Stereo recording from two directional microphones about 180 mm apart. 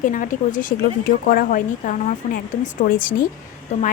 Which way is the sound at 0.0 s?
50° left (ahead or behind).